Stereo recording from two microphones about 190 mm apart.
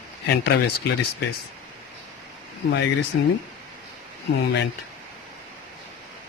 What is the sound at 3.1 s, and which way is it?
Speech, 90° left.